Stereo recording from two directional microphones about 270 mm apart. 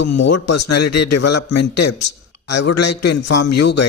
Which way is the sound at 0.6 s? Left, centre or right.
Left.